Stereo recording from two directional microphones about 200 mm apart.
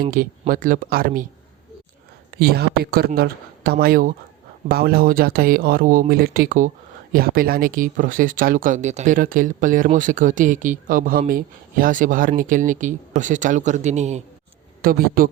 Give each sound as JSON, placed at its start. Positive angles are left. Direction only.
{"t": 0.1, "sound": "speech", "side_deg": -45}
{"t": 2.3, "sound": "speech", "side_deg": -50}
{"t": 14.8, "sound": "speech", "side_deg": -45}